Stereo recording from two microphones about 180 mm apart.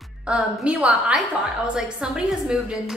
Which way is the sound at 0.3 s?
5° right (ahead or behind).